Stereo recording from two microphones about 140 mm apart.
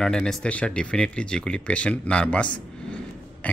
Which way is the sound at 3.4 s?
10° left (ahead or behind).